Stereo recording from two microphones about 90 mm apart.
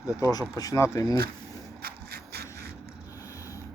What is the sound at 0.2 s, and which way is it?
Speech, 45° left (ahead or behind).